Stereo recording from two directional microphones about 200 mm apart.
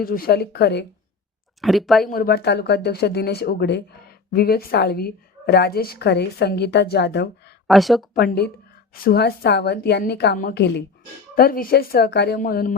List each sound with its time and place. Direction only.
0.0 s a woman's voice: 50° left (ahead or behind)
1.6 s speech: centre (ahead or behind)
2.0 s a woman's voice: 50° left (ahead or behind)
7.7 s speech: centre (ahead or behind)
8.1 s a woman's voice: 50° left (ahead or behind)
11.3 s a woman's voice: 45° left (ahead or behind)